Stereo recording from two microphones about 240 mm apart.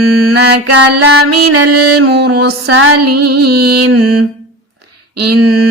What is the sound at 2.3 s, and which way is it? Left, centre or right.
Music, right.